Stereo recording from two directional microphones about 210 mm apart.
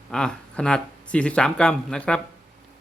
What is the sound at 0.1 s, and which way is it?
Speech, 5° left (ahead or behind).